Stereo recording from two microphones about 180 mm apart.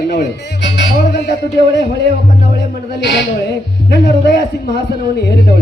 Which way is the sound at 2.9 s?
65° left (ahead or behind).